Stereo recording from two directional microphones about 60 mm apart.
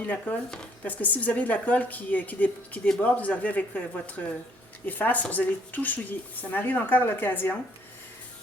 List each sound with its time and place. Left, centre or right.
0.0 s speech: left